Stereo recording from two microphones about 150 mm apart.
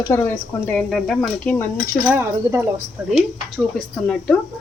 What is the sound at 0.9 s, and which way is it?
Speech, centre (ahead or behind).